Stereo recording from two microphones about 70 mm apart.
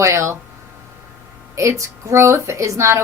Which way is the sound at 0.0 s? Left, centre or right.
Right.